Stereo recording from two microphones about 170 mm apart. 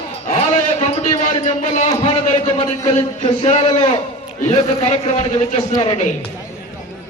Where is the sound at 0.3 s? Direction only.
40° left (ahead or behind).